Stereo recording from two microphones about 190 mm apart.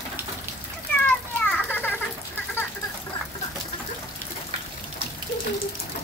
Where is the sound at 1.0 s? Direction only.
10° left (ahead or behind).